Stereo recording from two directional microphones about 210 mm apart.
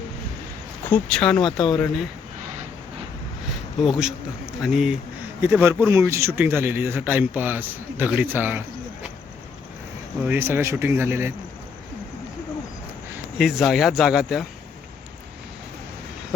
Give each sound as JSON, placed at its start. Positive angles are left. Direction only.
{"t": 0.9, "sound": "speech", "side_deg": 5}
{"t": 3.8, "sound": "a man's voice", "side_deg": -5}
{"t": 10.2, "sound": "a man's voice", "side_deg": -10}
{"t": 13.4, "sound": "speech", "side_deg": 0}